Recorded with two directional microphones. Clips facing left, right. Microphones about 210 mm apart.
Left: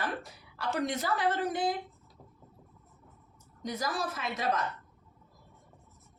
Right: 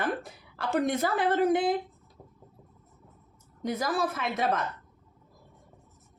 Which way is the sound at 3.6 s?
55° right (ahead or behind).